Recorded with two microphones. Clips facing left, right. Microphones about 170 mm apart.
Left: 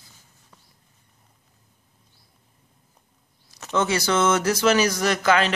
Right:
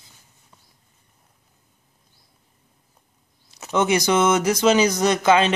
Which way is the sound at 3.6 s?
15° right (ahead or behind).